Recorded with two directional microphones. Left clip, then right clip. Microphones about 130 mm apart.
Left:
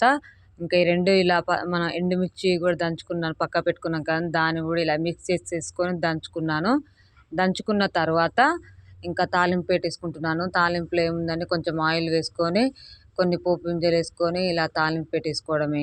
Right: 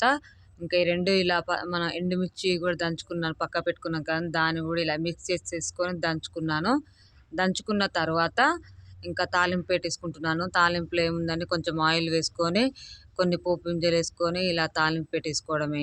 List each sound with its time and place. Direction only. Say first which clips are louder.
0.0 s speech: left 4 dB; 35° left (ahead or behind)